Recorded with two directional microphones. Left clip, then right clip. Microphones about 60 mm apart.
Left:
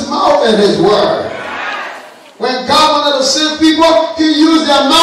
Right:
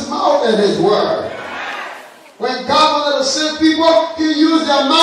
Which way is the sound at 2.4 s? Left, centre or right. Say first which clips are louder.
Left 3 dB; left.